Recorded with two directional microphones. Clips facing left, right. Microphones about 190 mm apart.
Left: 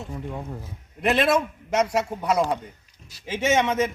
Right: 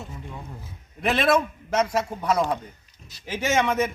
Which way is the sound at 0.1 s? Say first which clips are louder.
Left 6 dB; 50° left (ahead or behind).